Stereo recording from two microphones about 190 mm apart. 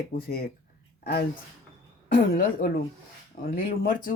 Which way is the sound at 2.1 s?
50° left (ahead or behind).